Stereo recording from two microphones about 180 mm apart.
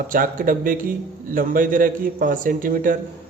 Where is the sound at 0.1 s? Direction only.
50° right (ahead or behind).